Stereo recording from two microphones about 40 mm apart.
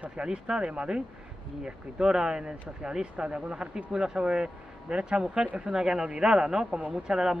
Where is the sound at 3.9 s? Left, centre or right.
Centre.